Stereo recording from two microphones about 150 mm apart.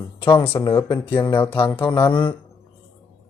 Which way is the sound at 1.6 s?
30° left (ahead or behind).